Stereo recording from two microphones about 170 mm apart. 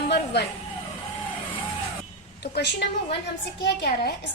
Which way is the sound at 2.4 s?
80° left.